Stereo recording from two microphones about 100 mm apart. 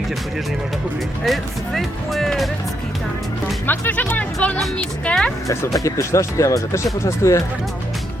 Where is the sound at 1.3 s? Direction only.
Centre (ahead or behind).